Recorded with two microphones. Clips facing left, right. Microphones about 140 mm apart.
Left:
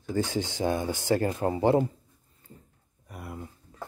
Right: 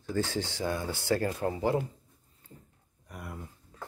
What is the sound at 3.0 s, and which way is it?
Speech, 5° left (ahead or behind).